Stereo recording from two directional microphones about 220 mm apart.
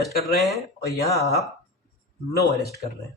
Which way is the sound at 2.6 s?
15° left (ahead or behind).